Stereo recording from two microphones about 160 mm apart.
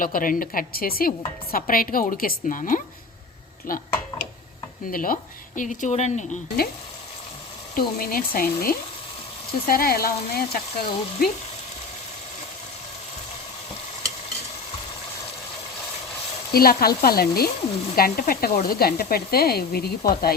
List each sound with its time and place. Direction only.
0.0 s a woman's voice: 60° left (ahead or behind)
4.9 s a woman's voice: 60° left (ahead or behind); by 6.2 s 45° left (ahead or behind)
7.8 s a woman's voice: 65° left (ahead or behind)
9.5 s speech: 65° left (ahead or behind)
16.5 s speech: 70° left (ahead or behind)